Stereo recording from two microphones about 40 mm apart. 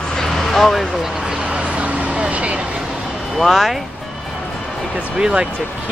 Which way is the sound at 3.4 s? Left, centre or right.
Centre.